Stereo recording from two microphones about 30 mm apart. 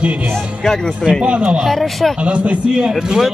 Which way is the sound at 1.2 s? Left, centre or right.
Right.